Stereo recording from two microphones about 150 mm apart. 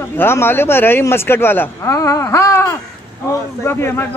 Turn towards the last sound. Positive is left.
turn(degrees=15)  # may be behind; listen again after turning